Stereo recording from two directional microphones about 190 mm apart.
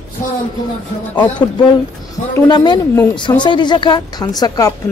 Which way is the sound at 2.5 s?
20° left (ahead or behind).